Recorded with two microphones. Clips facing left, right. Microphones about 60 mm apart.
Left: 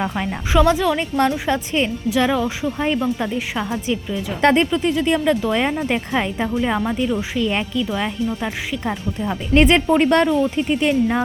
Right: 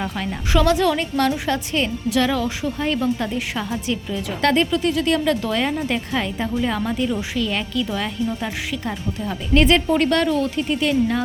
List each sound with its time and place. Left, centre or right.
0.0 s a woman's voice: left
7.2 s a woman's voice: left